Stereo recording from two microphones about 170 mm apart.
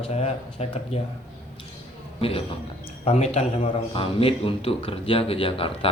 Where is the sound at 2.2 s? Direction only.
35° left (ahead or behind).